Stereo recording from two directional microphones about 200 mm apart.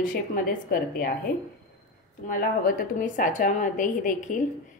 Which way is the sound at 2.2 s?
45° left (ahead or behind).